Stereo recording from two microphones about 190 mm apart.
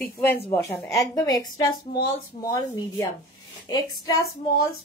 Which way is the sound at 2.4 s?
15° left (ahead or behind).